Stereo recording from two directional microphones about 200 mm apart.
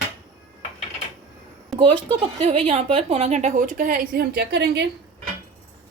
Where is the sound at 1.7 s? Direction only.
25° right (ahead or behind); by 4.8 s 55° right (ahead or behind).